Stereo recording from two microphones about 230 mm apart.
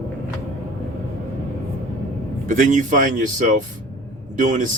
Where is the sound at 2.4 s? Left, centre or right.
Right.